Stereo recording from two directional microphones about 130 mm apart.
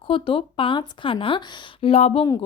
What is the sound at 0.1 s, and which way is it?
Speech, 40° left (ahead or behind).